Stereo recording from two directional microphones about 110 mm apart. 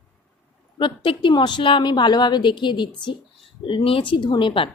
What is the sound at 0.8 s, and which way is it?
A woman's voice, 50° left (ahead or behind).